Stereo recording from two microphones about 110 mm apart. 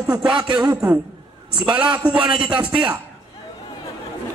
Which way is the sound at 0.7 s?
15° right (ahead or behind).